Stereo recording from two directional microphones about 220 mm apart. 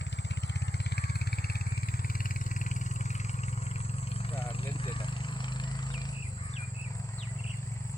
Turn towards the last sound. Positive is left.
turn(degrees=20)  # may be behind; listen again after turning